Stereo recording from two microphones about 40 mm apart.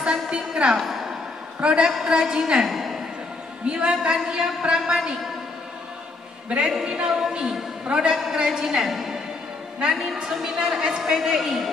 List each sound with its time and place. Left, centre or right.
0.0 s a sound: right
0.7 s a woman's voice: centre
1.6 s a man's voice: right
2.6 s a sound: centre
3.6 s a man's voice: right
6.8 s a man's voice: centre
9.8 s a woman's voice: right